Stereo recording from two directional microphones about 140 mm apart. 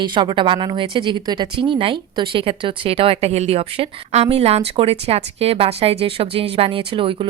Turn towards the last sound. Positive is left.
turn(degrees=-40)  # may be behind; listen again after turning